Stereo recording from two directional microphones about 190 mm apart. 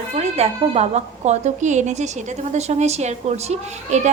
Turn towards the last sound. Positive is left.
turn(degrees=-35)  # may be behind; listen again after turning